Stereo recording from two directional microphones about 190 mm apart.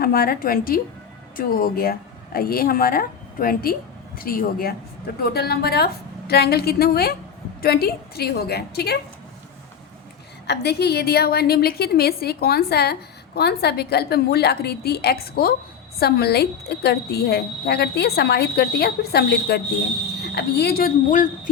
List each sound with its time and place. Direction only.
0.0 s a woman's voice: 50° left (ahead or behind)
10.4 s a woman's voice: 60° left (ahead or behind); by 21.5 s 45° left (ahead or behind)